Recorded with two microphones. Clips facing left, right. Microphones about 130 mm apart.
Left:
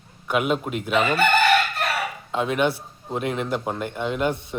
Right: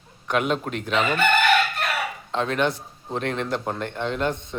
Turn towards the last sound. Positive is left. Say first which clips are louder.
# left 1 dB
turn(degrees=10)  # may be behind; listen again after turning